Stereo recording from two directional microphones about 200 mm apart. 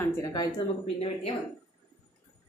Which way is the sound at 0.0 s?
15° left (ahead or behind).